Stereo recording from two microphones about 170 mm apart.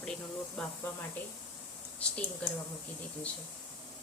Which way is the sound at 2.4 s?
10° left (ahead or behind).